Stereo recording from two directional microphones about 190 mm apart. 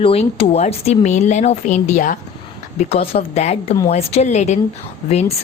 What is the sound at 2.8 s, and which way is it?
A woman's voice, 30° left (ahead or behind).